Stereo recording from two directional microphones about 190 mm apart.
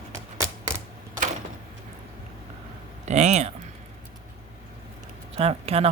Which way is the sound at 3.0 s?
35° right (ahead or behind).